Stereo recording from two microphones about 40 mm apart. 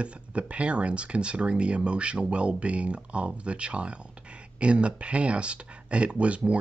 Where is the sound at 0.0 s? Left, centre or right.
Right.